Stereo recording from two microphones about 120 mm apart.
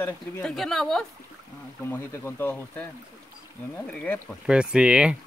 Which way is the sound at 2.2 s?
15° left (ahead or behind).